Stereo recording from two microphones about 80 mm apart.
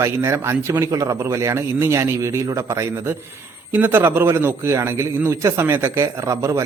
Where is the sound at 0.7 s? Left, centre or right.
Right.